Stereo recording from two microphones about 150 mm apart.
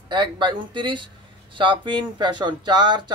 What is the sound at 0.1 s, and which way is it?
Speech, 30° right (ahead or behind).